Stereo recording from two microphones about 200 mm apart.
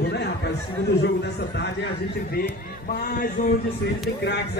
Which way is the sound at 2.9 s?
45° left (ahead or behind).